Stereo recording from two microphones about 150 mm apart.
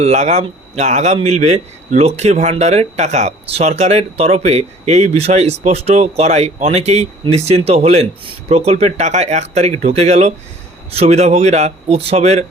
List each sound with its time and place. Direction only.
0.0 s speech: 45° right (ahead or behind)